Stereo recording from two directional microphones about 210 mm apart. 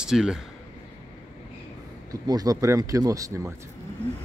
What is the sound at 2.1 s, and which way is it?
Speech, 15° right (ahead or behind).